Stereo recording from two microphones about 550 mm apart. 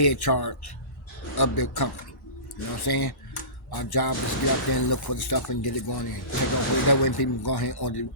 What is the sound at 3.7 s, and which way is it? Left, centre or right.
Speech, left.